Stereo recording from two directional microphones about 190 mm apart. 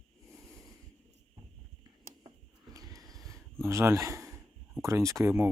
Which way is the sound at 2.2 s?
20° right (ahead or behind).